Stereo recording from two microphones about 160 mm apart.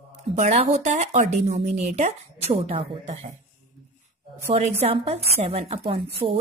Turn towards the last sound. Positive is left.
turn(degrees=-35)  # may be behind; listen again after turning